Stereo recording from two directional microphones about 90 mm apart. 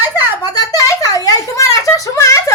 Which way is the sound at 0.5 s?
40° left (ahead or behind).